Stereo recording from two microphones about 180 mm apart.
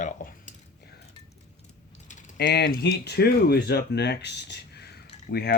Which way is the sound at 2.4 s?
70° left (ahead or behind).